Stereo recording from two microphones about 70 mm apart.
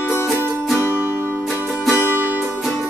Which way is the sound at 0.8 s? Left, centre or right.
Right.